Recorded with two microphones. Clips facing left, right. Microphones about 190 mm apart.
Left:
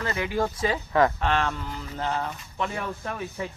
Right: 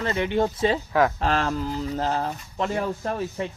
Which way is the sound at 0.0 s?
25° right (ahead or behind).